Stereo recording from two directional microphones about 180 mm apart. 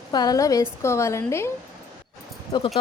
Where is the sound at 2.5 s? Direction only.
25° left (ahead or behind).